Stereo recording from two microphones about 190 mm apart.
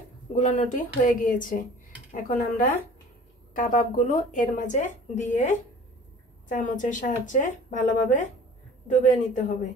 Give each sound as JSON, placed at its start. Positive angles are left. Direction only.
{"t": 0.3, "sound": "a woman's voice", "side_deg": 40}
{"t": 6.5, "sound": "a woman's voice", "side_deg": 40}